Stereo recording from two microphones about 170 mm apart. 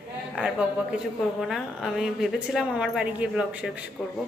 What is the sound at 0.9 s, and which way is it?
A woman's voice, centre (ahead or behind).